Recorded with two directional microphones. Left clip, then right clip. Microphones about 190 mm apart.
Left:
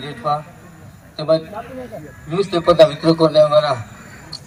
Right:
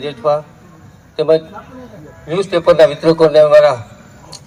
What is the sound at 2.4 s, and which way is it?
Speech, 45° right (ahead or behind).